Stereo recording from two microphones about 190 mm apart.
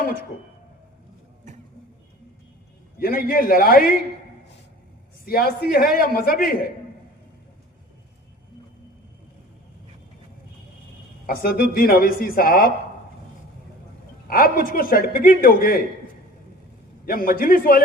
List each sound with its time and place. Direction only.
3.0 s a man's voice: 50° left (ahead or behind)
5.2 s a man's voice: 50° left (ahead or behind)
11.3 s a man's voice: 50° left (ahead or behind)
14.3 s a man's voice: 50° left (ahead or behind)
17.1 s a man's voice: 50° left (ahead or behind)